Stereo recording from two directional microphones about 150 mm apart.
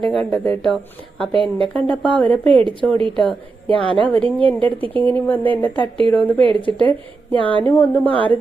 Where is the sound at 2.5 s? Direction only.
35° right (ahead or behind).